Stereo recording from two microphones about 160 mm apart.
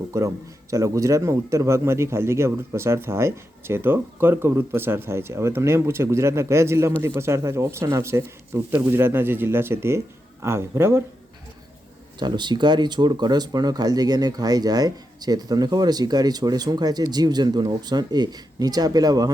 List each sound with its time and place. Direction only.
0.1 s a man's voice: 20° right (ahead or behind)
12.2 s speech: 30° right (ahead or behind)